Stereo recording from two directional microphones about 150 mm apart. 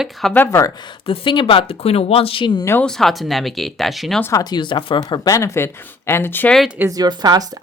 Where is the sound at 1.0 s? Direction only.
35° left (ahead or behind).